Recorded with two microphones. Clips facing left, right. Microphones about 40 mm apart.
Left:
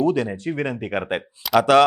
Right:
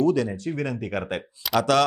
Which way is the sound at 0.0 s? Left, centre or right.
Left.